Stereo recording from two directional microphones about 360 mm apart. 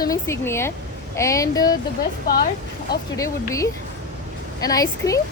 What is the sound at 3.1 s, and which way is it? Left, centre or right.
Speech, centre.